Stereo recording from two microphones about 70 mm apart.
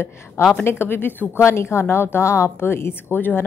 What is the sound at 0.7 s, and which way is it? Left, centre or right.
A woman's voice, left.